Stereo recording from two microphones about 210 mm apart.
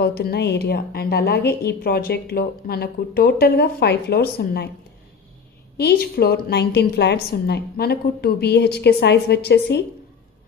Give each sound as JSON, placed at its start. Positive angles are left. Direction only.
{"t": 0.0, "sound": "a woman's voice", "side_deg": 50}
{"t": 5.8, "sound": "a woman's voice", "side_deg": 50}